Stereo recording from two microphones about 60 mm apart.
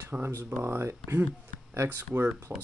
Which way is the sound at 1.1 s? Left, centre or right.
Right.